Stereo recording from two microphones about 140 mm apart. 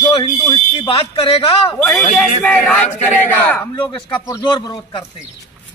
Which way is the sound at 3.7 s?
30° left (ahead or behind).